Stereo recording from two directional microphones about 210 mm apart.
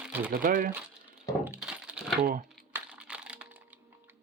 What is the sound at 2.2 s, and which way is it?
Speech, 45° right (ahead or behind).